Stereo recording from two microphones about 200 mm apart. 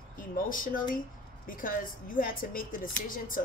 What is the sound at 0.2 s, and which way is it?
Speech, 45° left (ahead or behind).